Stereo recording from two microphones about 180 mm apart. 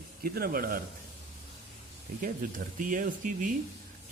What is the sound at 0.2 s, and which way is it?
Speech, 55° right (ahead or behind).